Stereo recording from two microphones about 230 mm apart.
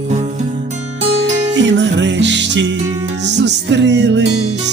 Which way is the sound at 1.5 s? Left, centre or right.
Right.